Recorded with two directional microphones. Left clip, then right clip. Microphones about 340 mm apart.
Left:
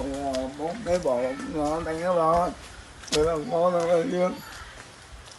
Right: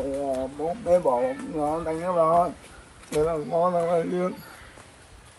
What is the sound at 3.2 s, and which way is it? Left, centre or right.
Speech, right.